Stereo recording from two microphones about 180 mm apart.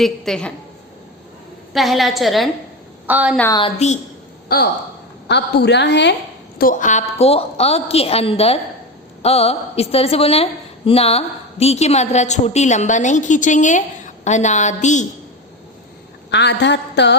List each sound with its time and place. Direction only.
0.0 s a woman's voice: 5° left (ahead or behind)
1.7 s a woman's voice: centre (ahead or behind)
3.8 s a woman's voice: 35° left (ahead or behind)
4.4 s speech: 60° left (ahead or behind)
5.3 s a sound: 70° left (ahead or behind)
6.6 s a woman's voice: 45° left (ahead or behind)
16.3 s a sound: 70° left (ahead or behind)